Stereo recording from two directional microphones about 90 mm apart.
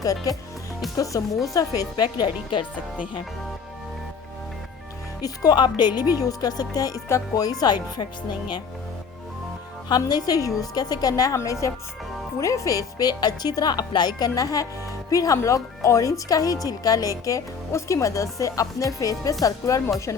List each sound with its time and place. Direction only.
0.0 s speech: 40° left (ahead or behind); by 2.6 s 60° left (ahead or behind)
5.2 s speech: 45° left (ahead or behind)
9.9 s speech: 45° left (ahead or behind)